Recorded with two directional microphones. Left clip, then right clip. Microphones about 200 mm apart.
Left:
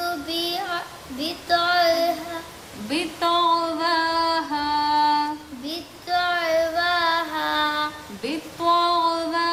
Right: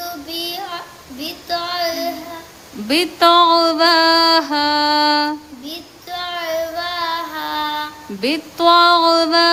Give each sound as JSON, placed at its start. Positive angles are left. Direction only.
{"t": 0.0, "sound": "child singing", "side_deg": 0}
{"t": 2.9, "sound": "music", "side_deg": -60}
{"t": 5.6, "sound": "child singing", "side_deg": 0}
{"t": 8.2, "sound": "a sound", "side_deg": -60}